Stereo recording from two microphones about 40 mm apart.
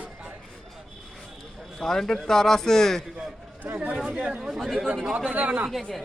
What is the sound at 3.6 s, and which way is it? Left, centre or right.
Speech, right.